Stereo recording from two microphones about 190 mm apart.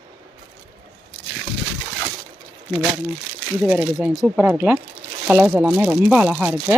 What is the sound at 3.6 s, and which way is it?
Speech, 5° right (ahead or behind).